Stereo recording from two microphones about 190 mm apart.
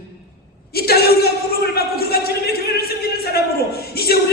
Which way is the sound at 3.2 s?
55° left (ahead or behind).